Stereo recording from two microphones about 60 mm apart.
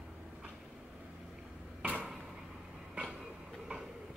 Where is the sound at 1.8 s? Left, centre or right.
Right.